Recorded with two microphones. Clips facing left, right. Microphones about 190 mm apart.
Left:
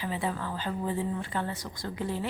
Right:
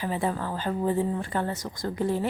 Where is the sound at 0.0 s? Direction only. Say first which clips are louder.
Right 4 dB; 45° right (ahead or behind).